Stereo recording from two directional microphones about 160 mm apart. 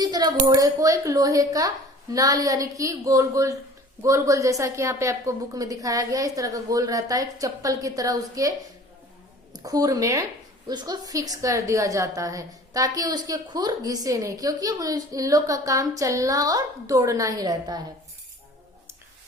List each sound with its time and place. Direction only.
0.0 s a woman's voice: 25° right (ahead or behind)